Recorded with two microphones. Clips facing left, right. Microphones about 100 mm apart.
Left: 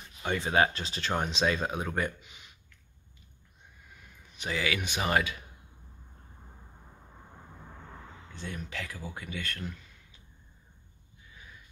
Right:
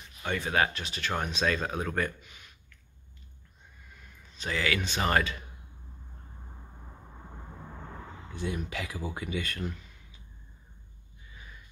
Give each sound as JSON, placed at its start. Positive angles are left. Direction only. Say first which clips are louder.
{"t": 0.2, "sound": "speech", "louder": "left 2 dB", "side_deg": 25}
{"t": 4.3, "sound": "speech", "louder": "right 1 dB", "side_deg": 15}
{"t": 8.4, "sound": "speech", "louder": "right 5 dB", "side_deg": -10}